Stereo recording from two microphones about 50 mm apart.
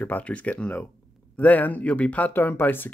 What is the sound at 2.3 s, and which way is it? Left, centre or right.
Speech, left.